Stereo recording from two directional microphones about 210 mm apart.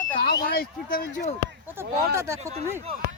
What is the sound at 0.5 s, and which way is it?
Speech, 45° left (ahead or behind).